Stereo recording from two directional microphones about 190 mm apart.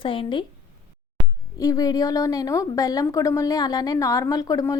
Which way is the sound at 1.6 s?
20° left (ahead or behind).